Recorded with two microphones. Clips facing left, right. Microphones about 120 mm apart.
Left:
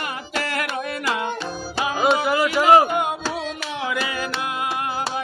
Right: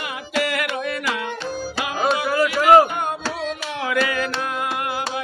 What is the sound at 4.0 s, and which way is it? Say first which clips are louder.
Music: right 5 dB; 15° left (ahead or behind).